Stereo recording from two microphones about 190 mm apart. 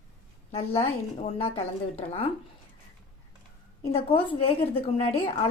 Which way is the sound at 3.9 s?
30° left (ahead or behind).